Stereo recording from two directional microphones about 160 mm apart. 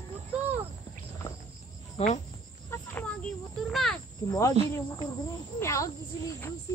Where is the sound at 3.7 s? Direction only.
Centre (ahead or behind).